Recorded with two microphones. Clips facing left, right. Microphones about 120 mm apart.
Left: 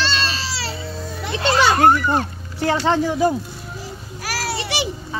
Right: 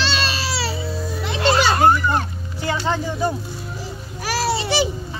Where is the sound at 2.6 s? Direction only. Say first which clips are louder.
Left 5 dB; 65° left (ahead or behind); by 3.3 s 90° left.